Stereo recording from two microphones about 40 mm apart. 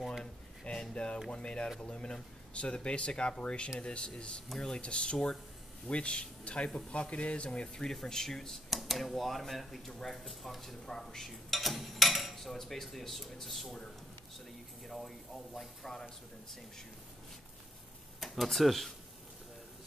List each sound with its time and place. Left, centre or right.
0.2 s a sound: left
1.3 s speech: left
8.6 s speech: centre
14.9 s speech: centre
18.2 s speech: centre